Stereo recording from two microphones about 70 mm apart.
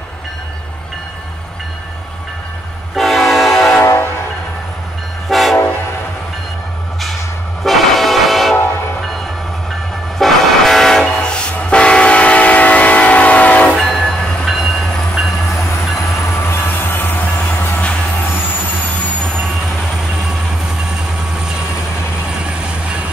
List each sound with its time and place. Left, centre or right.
3.0 s train: centre
3.8 s train: left
5.3 s train: centre
7.6 s music: centre
10.1 s train: centre; by 13.7 s left
13.7 s train: centre
16.6 s music: left